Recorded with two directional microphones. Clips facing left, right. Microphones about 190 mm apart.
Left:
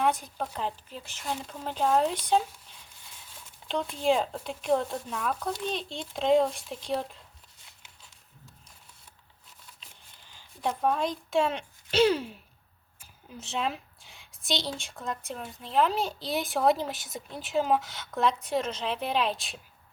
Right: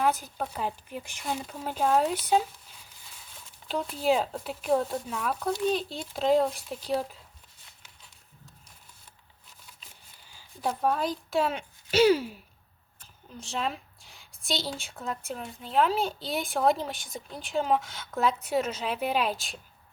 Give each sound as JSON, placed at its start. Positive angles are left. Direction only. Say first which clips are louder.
{"t": 0.0, "sound": "speech", "louder": "even", "side_deg": 0}
{"t": 3.7, "sound": "speech", "louder": "even", "side_deg": -5}
{"t": 10.2, "sound": "a woman's voice", "louder": "even", "side_deg": -5}
{"t": 13.0, "sound": "a sound", "louder": "even", "side_deg": 5}
{"t": 14.8, "sound": "speech", "louder": "even", "side_deg": 0}